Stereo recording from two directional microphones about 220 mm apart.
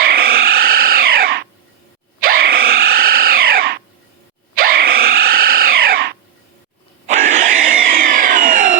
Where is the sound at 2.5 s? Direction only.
45° right (ahead or behind).